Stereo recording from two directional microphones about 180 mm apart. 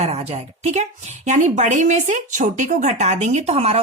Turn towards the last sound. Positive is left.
turn(degrees=-35)  # may be behind; listen again after turning